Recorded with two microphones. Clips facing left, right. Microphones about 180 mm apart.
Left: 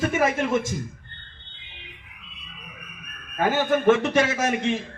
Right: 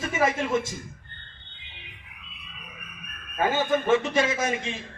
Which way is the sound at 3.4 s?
70° left (ahead or behind).